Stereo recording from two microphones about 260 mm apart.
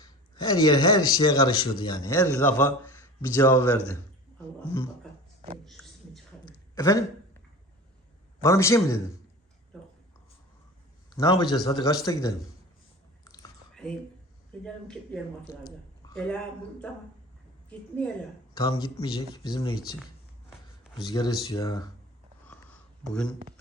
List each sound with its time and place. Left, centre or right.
0.0 s speech: centre
5.6 s a sound: centre
6.4 s a sound: centre
8.4 s speech: centre
11.1 s speech: centre
13.2 s chewing: centre
14.6 s speech: centre
17.7 s a woman's voice: centre
18.5 s speech: centre
20.9 s speech: centre
22.4 s a sound: centre